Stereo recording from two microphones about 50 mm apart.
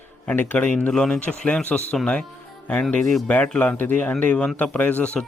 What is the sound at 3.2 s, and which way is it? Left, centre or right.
A man's voice, left.